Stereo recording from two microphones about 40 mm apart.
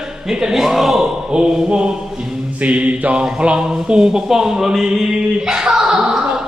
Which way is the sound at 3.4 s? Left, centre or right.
Right.